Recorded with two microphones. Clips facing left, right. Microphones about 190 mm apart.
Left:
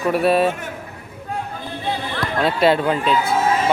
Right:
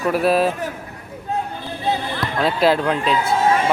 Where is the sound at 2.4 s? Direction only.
Centre (ahead or behind).